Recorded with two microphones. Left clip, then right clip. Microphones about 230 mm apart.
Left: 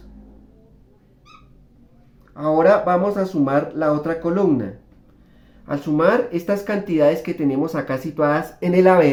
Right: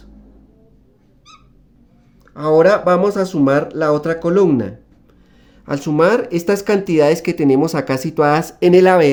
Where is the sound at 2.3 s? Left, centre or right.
Right.